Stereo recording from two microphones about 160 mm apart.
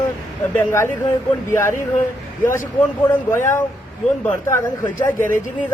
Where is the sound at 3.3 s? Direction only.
15° left (ahead or behind).